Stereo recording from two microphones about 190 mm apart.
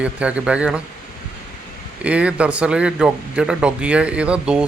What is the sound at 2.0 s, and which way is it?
Speech, 5° right (ahead or behind).